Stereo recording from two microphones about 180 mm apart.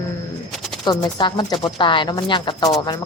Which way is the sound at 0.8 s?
25° left (ahead or behind).